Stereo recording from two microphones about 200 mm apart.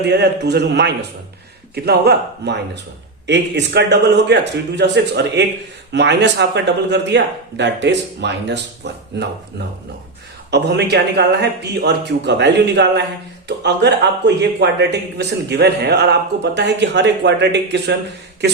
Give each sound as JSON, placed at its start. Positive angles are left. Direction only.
{"t": 0.0, "sound": "speech", "side_deg": -55}